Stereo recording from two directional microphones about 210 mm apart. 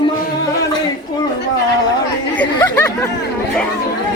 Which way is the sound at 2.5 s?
15° left (ahead or behind).